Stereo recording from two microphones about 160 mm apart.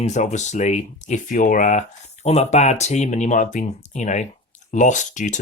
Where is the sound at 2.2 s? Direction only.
40° left (ahead or behind).